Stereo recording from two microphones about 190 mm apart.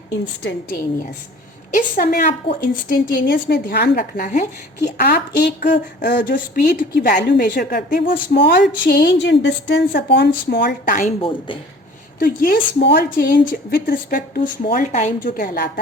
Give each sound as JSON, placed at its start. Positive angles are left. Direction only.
{"t": 1.7, "sound": "speech", "side_deg": 50}
{"t": 2.5, "sound": "a woman's voice", "side_deg": 65}
{"t": 2.9, "sound": "a woman's voice", "side_deg": 50}
{"t": 11.2, "sound": "speech", "side_deg": 25}
{"t": 12.2, "sound": "speech", "side_deg": 50}